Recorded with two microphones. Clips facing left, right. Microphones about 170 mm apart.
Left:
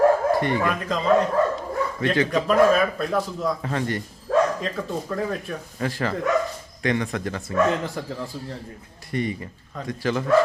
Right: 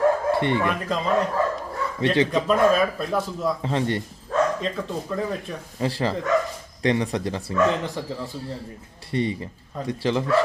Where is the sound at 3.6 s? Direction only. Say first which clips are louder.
Right 2 dB; 25° right (ahead or behind).